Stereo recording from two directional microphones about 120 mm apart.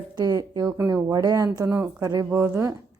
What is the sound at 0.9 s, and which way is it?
Speech, 20° right (ahead or behind).